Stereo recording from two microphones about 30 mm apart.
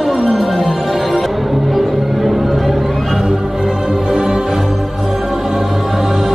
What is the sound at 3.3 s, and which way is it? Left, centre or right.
Music, centre.